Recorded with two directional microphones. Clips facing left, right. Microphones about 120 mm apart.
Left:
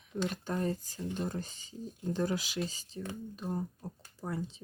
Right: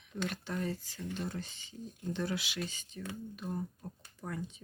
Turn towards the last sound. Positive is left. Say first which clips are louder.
# left 3 dB
turn(degrees=30)  # may be behind; listen again after turning